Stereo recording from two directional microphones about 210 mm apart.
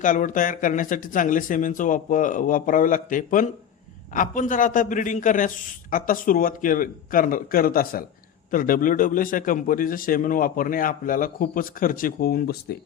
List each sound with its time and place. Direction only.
0.0 s a man's voice: 40° left (ahead or behind)